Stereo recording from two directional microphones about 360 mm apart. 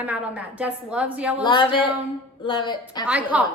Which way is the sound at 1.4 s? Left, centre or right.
Centre.